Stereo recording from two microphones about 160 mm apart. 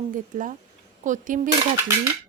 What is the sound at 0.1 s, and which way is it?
A woman's voice, 55° right (ahead or behind).